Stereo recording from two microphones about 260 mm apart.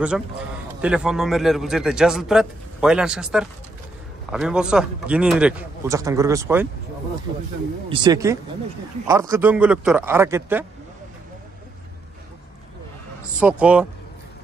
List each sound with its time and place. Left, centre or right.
0.7 s a man's voice: centre
7.9 s a man's voice: centre
13.4 s a man's voice: centre